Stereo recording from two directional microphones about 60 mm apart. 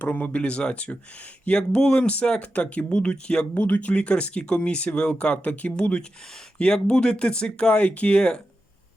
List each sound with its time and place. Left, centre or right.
0.0 s speech: left